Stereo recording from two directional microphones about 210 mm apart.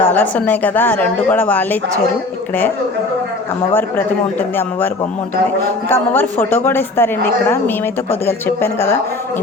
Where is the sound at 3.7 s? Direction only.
10° left (ahead or behind).